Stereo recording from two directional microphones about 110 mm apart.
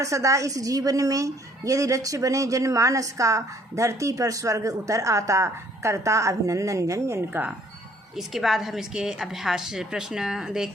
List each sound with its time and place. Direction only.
0.0 s a woman's voice: 30° right (ahead or behind)
8.1 s a woman's voice: centre (ahead or behind)